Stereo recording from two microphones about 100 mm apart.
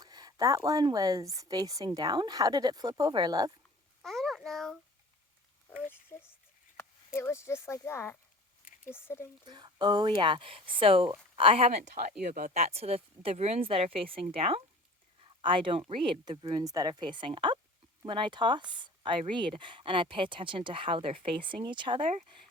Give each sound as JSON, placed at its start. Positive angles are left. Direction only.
{"t": 0.0, "sound": "speech", "side_deg": -40}
{"t": 4.0, "sound": "a sound", "side_deg": 0}
{"t": 6.1, "sound": "speech", "side_deg": 30}
{"t": 9.5, "sound": "speech", "side_deg": -45}
{"t": 12.5, "sound": "speech", "side_deg": -90}
{"t": 15.2, "sound": "speech", "side_deg": -55}
{"t": 16.6, "sound": "a woman's voice", "side_deg": -40}